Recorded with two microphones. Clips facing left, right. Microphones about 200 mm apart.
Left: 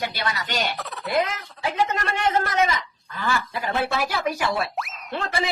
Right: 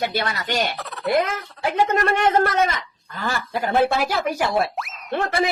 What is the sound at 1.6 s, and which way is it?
A woman's voice, 50° right (ahead or behind).